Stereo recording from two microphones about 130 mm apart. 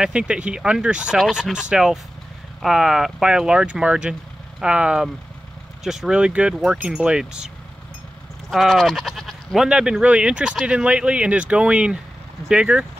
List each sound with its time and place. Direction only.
0.0 s speech: 5° right (ahead or behind)
8.5 s speech: centre (ahead or behind)